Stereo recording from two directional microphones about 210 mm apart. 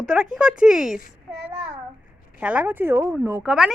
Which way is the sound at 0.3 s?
5° right (ahead or behind).